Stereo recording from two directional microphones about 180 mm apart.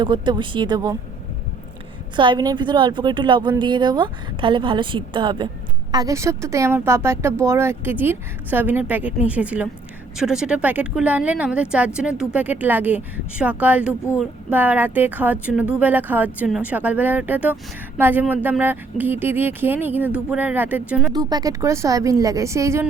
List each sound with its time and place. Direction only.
0.0 s a woman's voice: 25° right (ahead or behind)
2.1 s a woman's voice: 25° right (ahead or behind); by 21.1 s 10° right (ahead or behind)
21.1 s speech: 20° right (ahead or behind)